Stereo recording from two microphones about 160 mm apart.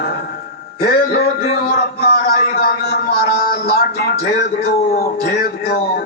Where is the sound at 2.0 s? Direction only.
75° left (ahead or behind).